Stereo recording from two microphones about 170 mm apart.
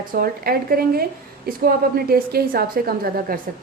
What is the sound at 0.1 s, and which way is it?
A woman's voice, 60° right (ahead or behind).